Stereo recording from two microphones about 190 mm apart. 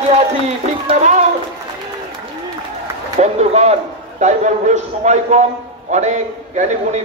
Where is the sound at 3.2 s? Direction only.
35° right (ahead or behind).